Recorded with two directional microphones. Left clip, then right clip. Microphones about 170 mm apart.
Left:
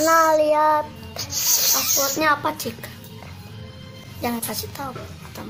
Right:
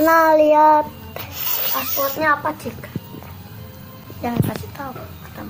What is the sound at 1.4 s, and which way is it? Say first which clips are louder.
Snake: left 5 dB; centre (ahead or behind).